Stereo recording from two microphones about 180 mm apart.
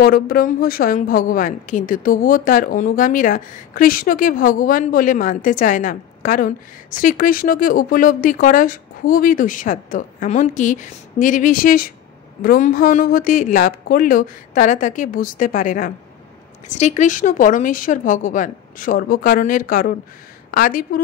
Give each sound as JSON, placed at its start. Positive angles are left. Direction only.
{"t": 0.0, "sound": "a woman's voice", "side_deg": 55}